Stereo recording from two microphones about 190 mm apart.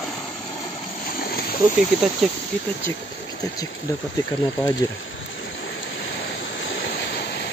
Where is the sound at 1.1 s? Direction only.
50° left (ahead or behind).